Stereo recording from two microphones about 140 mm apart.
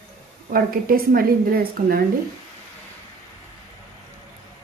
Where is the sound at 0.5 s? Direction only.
90° right.